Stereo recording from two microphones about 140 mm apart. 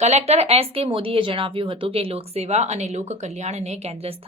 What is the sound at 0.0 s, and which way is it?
Speech, 50° right (ahead or behind).